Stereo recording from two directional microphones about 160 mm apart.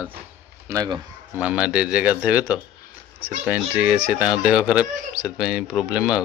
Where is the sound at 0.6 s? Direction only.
25° right (ahead or behind).